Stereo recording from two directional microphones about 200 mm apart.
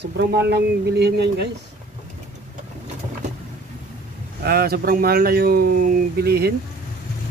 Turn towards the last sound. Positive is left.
turn(degrees=-50)  # may be behind; listen again after turning